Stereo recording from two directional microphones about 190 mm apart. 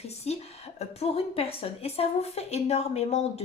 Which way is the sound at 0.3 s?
35° left (ahead or behind).